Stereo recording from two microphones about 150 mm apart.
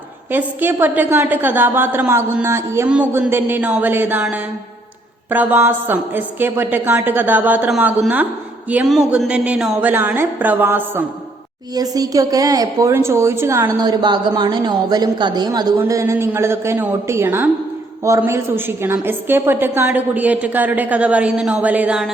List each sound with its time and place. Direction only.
0.3 s a woman's voice: 15° right (ahead or behind)
11.7 s a woman's voice: 25° right (ahead or behind)
13.7 s a woman's voice: 30° right (ahead or behind); by 22.1 s 5° right (ahead or behind)